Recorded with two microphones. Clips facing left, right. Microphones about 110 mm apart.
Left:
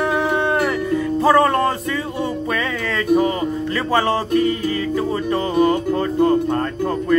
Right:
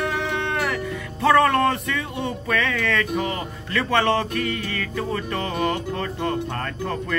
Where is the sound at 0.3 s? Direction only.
45° left (ahead or behind).